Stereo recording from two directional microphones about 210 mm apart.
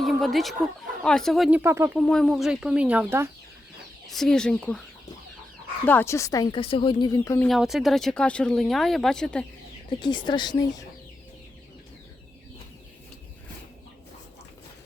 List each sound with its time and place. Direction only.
0.0 s a sound: centre (ahead or behind)
1.0 s speech: 5° left (ahead or behind)
2.0 s speech: centre (ahead or behind)
4.0 s speech: centre (ahead or behind)
5.8 s a woman's voice: 10° left (ahead or behind)
7.4 s speech: centre (ahead or behind)
10.0 s speech: 20° left (ahead or behind)